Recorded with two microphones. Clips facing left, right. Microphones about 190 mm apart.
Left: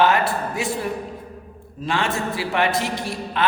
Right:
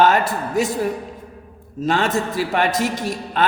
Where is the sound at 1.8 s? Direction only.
40° right (ahead or behind).